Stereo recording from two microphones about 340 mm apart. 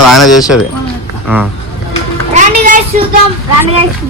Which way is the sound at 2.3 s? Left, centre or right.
Right.